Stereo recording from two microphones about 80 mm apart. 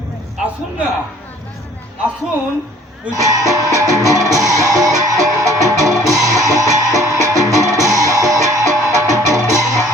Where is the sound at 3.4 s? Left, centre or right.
Right.